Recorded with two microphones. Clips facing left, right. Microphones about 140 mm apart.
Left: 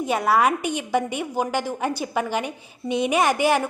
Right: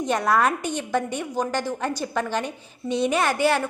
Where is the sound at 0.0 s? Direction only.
5° left (ahead or behind).